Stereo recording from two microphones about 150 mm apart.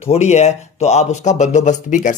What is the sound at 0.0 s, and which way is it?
Speech, 45° left (ahead or behind).